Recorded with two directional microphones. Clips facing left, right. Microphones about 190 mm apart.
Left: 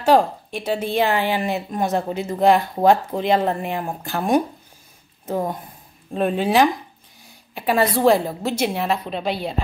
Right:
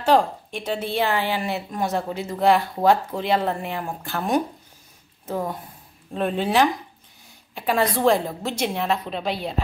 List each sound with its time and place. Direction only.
0.0 s a woman's voice: 10° left (ahead or behind)